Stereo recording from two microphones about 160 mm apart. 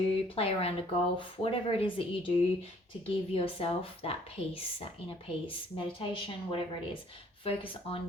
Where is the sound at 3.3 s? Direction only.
35° left (ahead or behind).